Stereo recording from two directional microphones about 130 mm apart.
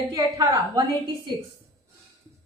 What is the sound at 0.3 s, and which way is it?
Speech, 25° right (ahead or behind).